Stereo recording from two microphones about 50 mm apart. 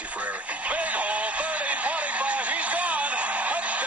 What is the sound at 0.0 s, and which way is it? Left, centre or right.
Radio, right.